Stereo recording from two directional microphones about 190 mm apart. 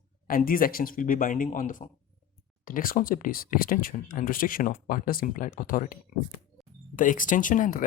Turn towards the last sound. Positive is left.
turn(degrees=45)  # may be behind; listen again after turning